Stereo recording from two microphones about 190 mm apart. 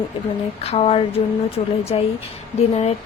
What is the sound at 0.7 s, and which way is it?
Speech, 35° left (ahead or behind).